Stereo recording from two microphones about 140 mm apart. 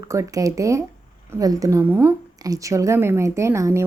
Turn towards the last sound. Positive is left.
turn(degrees=-20)  # may be behind; listen again after turning